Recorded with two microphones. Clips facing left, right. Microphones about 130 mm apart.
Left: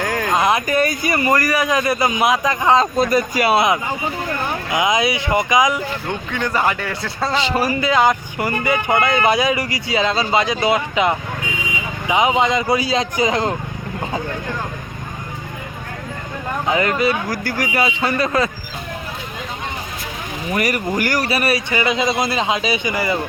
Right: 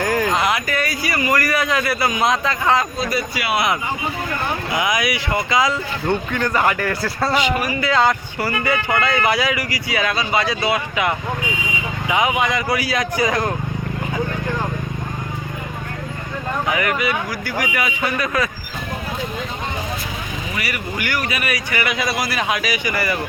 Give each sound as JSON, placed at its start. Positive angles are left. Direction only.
{"t": 0.0, "sound": "a sound", "side_deg": -5}
{"t": 0.3, "sound": "speech", "side_deg": 20}
{"t": 3.0, "sound": "speech", "side_deg": 45}
{"t": 4.7, "sound": "speech", "side_deg": 20}
{"t": 6.3, "sound": "a man's voice", "side_deg": 5}
{"t": 7.3, "sound": "speech", "side_deg": 30}
{"t": 7.8, "sound": "speech", "side_deg": 15}
{"t": 16.6, "sound": "speech", "side_deg": 25}
{"t": 20.5, "sound": "speech", "side_deg": 45}